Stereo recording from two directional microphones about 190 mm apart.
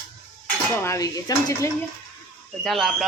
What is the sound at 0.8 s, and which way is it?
Speech, 15° left (ahead or behind).